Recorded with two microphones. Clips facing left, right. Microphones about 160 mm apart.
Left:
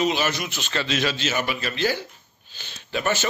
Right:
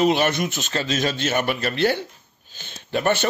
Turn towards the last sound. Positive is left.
turn(degrees=-55)  # may be behind; listen again after turning